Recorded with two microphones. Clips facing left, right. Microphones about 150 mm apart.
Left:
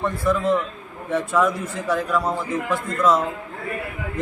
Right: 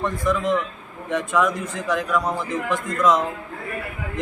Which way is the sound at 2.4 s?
10° left (ahead or behind).